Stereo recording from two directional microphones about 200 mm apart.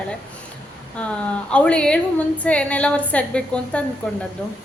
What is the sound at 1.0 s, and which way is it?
A woman's voice, 5° left (ahead or behind).